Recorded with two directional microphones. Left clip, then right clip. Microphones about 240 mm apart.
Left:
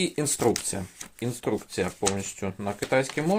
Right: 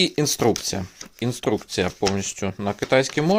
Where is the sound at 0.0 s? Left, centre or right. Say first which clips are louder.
Right 5 dB; right.